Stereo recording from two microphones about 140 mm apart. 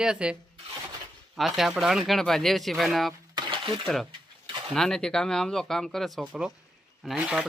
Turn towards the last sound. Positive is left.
turn(degrees=-5)  # may be behind; listen again after turning